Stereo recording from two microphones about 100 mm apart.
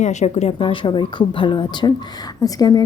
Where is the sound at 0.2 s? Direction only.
90° left.